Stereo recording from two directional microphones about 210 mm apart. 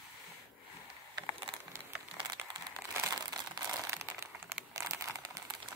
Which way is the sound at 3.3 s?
15° right (ahead or behind).